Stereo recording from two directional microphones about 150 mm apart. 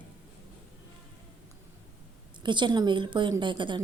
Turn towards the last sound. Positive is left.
turn(degrees=-30)  # may be behind; listen again after turning